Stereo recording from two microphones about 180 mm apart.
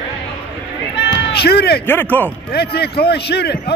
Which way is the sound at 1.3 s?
65° left (ahead or behind).